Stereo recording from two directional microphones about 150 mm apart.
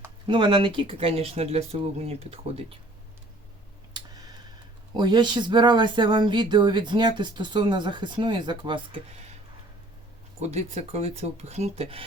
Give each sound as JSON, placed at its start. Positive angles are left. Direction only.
{"t": 0.3, "sound": "speech", "side_deg": -35}
{"t": 3.9, "sound": "a sound", "side_deg": -25}
{"t": 4.9, "sound": "speech", "side_deg": -30}
{"t": 10.4, "sound": "speech", "side_deg": -45}